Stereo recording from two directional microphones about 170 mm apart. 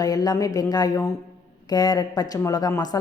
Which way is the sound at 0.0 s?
20° left (ahead or behind).